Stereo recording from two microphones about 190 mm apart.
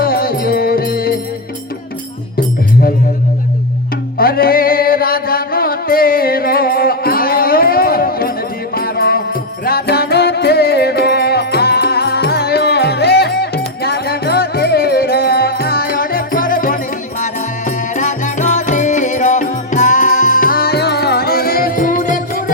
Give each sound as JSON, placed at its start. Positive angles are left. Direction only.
{"t": 0.0, "sound": "music", "side_deg": 50}
{"t": 4.2, "sound": "music", "side_deg": 50}